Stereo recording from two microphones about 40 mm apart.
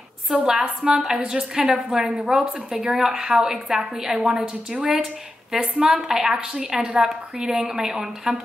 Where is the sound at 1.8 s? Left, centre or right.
Centre.